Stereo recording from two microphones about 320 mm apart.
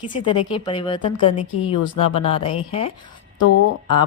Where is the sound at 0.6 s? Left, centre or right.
Centre.